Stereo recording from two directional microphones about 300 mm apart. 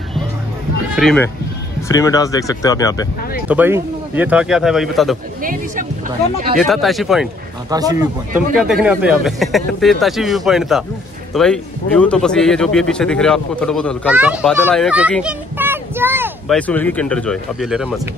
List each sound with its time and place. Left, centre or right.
0.9 s speech: centre
3.4 s speech: centre
5.4 s speech: right
6.6 s speech: centre
7.7 s speech: centre
8.3 s speech: right
8.5 s speech: centre
16.5 s speech: centre